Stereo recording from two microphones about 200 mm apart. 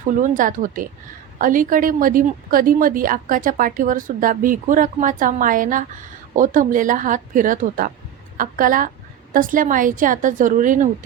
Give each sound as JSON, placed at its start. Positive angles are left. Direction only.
{"t": 0.1, "sound": "a woman's voice", "side_deg": -40}